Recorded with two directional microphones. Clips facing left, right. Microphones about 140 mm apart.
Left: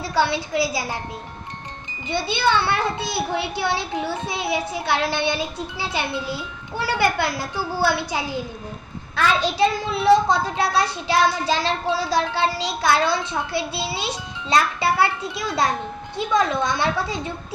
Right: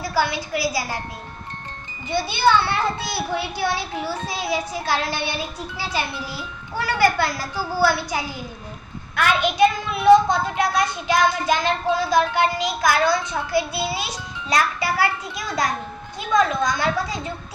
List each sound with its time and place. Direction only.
0.2 s a child's voice: 25° left (ahead or behind)
2.0 s a child's voice: 25° left (ahead or behind)
9.4 s a child's voice: 30° left (ahead or behind)